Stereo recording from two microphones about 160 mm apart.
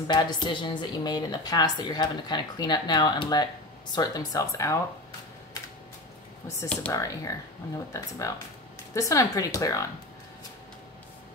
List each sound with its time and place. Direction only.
0.1 s speech: 30° left (ahead or behind)
6.9 s speech: 20° left (ahead or behind)